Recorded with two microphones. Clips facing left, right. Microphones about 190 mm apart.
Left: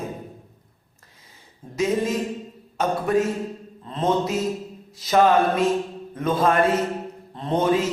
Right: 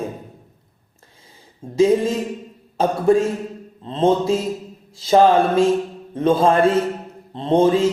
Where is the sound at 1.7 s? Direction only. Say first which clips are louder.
Right 7 dB; 30° right (ahead or behind).